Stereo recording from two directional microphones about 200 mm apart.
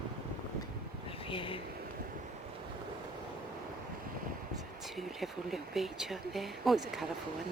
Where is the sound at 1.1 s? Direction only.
25° left (ahead or behind).